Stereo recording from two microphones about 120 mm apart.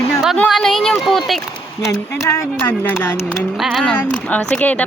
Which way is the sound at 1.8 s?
25° left (ahead or behind).